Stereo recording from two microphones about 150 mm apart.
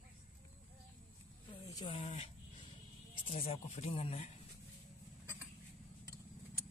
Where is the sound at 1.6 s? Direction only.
25° left (ahead or behind).